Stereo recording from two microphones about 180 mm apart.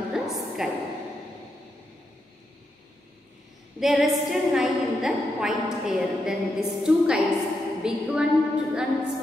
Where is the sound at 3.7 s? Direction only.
Centre (ahead or behind).